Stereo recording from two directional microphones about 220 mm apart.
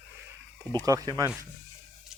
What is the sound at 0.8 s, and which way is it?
Speech, 15° right (ahead or behind).